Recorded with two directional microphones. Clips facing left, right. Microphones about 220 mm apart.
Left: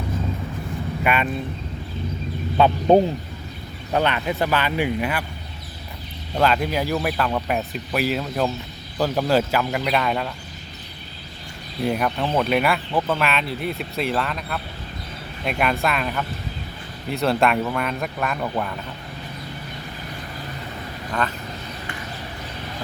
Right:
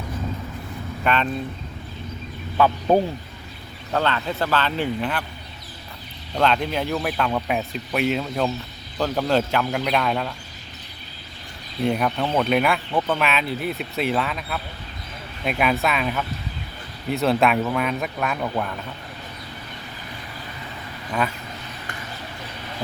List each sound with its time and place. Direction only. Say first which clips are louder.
1.0 s speech: even; 10° left (ahead or behind)
2.6 s speech: left 3 dB; 25° left (ahead or behind)
6.3 s speech: left 1 dB; 5° left (ahead or behind)
11.8 s speech: right 1 dB; centre (ahead or behind)